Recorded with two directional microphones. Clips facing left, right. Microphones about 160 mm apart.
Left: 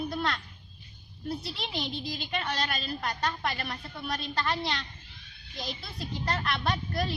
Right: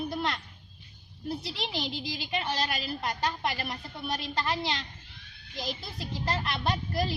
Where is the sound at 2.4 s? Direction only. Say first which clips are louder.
Right 1 dB; 20° right (ahead or behind).